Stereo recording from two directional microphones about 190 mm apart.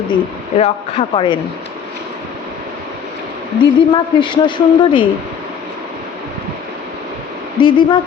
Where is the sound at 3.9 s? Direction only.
25° left (ahead or behind).